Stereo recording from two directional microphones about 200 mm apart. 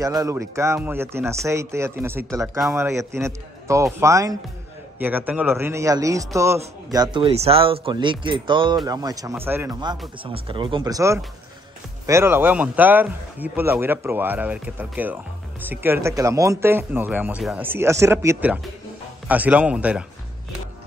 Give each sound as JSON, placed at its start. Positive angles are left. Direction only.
{"t": 0.0, "sound": "a man's voice", "side_deg": -15}